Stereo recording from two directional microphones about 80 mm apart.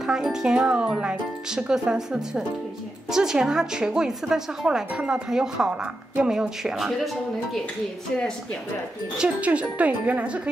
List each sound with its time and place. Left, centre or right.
0.0 s a woman's voice: centre
9.2 s a woman's voice: centre